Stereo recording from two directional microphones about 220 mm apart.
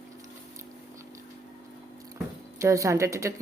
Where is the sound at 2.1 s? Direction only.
15° right (ahead or behind).